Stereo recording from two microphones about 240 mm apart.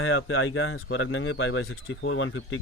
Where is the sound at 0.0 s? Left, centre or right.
Left.